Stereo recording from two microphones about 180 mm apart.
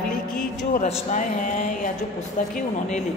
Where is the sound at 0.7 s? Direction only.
40° left (ahead or behind).